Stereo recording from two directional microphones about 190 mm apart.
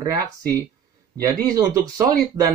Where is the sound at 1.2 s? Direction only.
20° right (ahead or behind).